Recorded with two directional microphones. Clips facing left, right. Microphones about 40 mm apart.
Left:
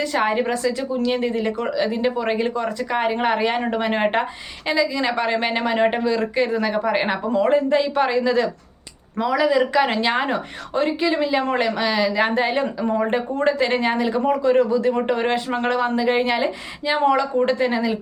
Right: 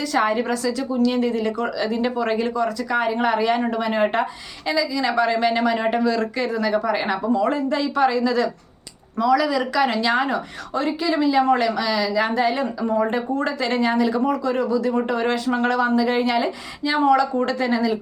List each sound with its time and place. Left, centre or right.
0.0 s speech: left
2.4 s speech: left